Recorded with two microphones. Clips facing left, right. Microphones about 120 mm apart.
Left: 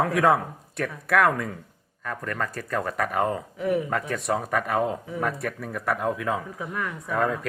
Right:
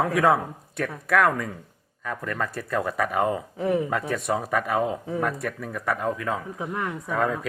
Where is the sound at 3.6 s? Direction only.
30° right (ahead or behind).